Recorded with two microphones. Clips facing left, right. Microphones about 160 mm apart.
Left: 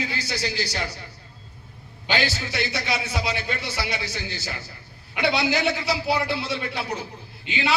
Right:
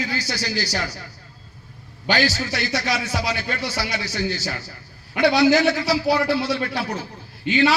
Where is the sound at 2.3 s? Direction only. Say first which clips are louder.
Right 3 dB; 25° left (ahead or behind).